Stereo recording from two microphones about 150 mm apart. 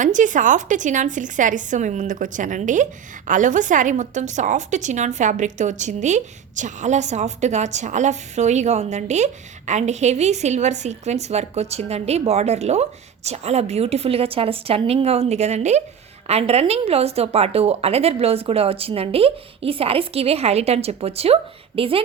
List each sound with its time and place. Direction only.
0.0 s a woman's voice: 55° right (ahead or behind); by 22.0 s 40° right (ahead or behind)